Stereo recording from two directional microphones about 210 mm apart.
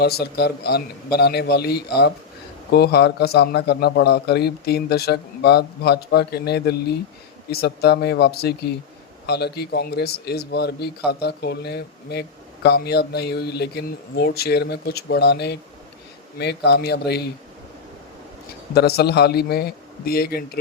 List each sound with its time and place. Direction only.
0.0 s a man's voice: 50° left (ahead or behind)
18.7 s a man's voice: 50° left (ahead or behind)